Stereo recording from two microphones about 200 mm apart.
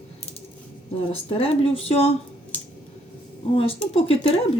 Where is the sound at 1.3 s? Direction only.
30° left (ahead or behind).